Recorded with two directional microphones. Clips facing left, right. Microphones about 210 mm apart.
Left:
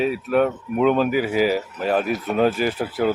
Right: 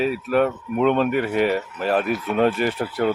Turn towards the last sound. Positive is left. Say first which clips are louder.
# even
turn(degrees=0)  # may be behind; listen again after turning